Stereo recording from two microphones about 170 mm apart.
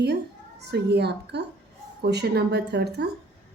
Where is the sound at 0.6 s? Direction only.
80° right.